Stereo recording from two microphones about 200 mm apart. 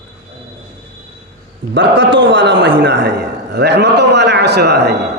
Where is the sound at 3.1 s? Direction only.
55° right (ahead or behind).